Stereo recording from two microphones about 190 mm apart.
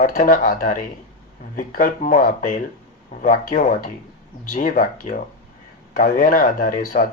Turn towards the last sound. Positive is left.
turn(degrees=45)  # may be behind; listen again after turning